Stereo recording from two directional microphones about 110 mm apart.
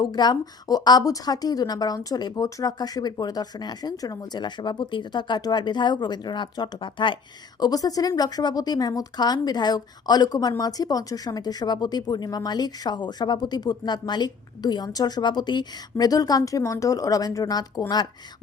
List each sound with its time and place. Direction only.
0.0 s a woman's voice: 40° left (ahead or behind)
7.6 s a woman's voice: 35° left (ahead or behind)